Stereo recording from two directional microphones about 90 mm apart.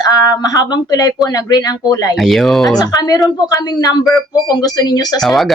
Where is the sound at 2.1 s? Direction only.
Centre (ahead or behind).